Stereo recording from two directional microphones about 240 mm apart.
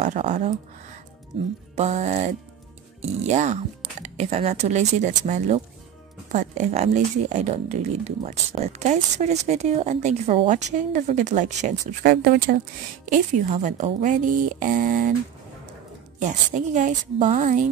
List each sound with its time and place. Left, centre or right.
0.0 s speech: right
1.8 s speech: right
16.2 s speech: right